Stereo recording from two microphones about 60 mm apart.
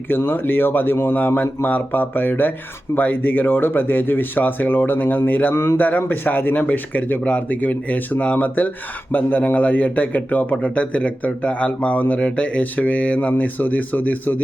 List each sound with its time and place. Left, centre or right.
0.1 s a man's voice: left